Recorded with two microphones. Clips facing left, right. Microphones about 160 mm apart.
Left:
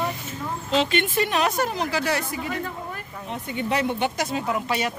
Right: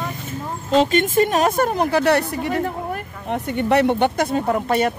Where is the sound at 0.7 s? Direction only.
45° right (ahead or behind).